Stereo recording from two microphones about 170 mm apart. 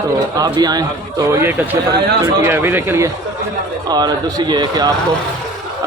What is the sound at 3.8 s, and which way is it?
A man's voice, 25° right (ahead or behind).